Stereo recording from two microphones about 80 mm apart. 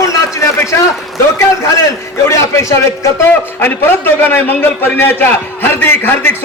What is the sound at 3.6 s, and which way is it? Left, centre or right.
A man's voice, left.